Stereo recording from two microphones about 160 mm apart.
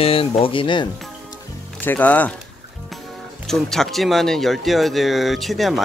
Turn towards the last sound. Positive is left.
turn(degrees=0)  # may be behind; listen again after turning